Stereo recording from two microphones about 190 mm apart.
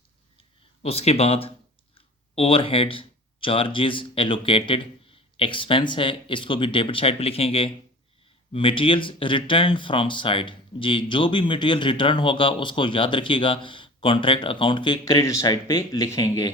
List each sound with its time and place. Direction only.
0.8 s speech: 30° left (ahead or behind)